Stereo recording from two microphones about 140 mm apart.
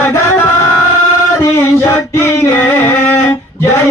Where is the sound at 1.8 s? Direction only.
20° left (ahead or behind).